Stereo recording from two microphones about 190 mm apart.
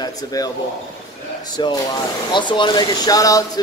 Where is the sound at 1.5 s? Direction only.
20° left (ahead or behind).